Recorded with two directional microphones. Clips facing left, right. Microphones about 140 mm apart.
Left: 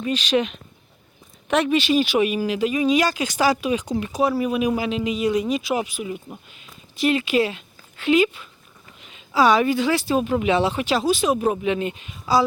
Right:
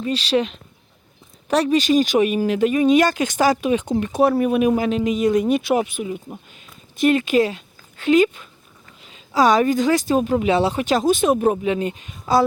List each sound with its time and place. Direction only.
0.0 s speech: 35° right (ahead or behind); by 5.8 s 55° right (ahead or behind)
6.6 s a sound: 50° right (ahead or behind)
9.0 s speech: 35° right (ahead or behind)